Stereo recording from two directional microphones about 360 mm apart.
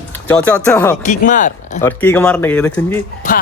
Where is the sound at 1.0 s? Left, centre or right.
Left.